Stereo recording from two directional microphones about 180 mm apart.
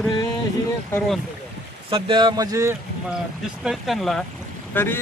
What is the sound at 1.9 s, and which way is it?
Speech, 25° right (ahead or behind).